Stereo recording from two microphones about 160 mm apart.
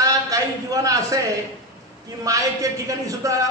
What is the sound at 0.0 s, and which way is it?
A man's voice, 20° right (ahead or behind).